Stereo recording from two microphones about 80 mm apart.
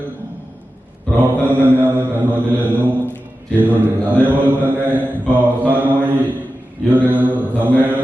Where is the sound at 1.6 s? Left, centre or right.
Right.